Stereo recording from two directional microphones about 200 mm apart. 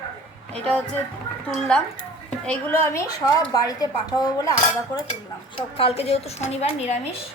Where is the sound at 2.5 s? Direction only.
10° left (ahead or behind).